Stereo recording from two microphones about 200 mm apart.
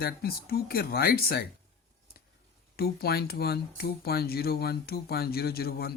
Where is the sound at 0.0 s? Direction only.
50° left (ahead or behind).